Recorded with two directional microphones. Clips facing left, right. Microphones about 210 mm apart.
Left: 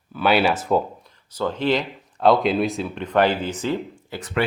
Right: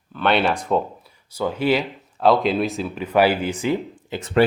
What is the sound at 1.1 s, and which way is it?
Speech, 10° right (ahead or behind).